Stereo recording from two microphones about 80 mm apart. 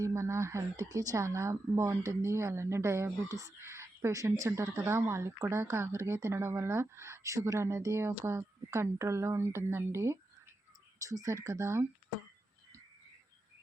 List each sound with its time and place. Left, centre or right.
0.0 s a woman's voice: right